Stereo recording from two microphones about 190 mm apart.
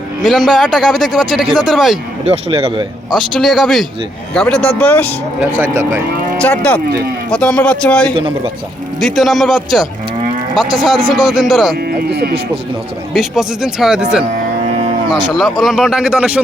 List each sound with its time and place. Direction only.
0.2 s a man's voice: centre (ahead or behind)
2.3 s speech: 30° right (ahead or behind)
3.2 s a man's voice: centre (ahead or behind)
6.4 s a man's voice: 5° left (ahead or behind)
11.9 s speech: 55° right (ahead or behind)
13.1 s a man's voice: centre (ahead or behind)
15.3 s a man's voice: centre (ahead or behind)